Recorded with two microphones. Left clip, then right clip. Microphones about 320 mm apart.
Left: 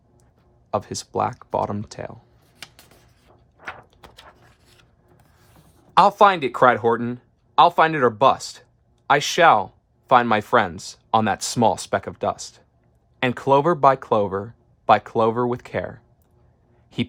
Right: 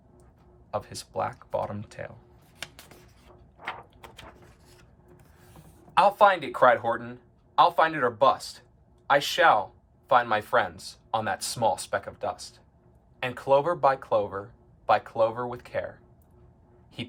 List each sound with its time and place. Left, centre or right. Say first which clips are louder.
0.7 s speech: left 8 dB; centre
2.6 s a sound: right 1 dB; centre
6.0 s speech: left 5 dB; centre